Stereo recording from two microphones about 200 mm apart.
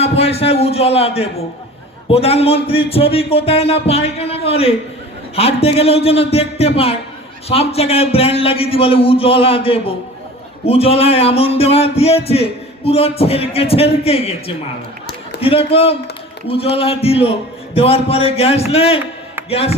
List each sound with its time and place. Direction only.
0.0 s a man's voice: 30° left (ahead or behind)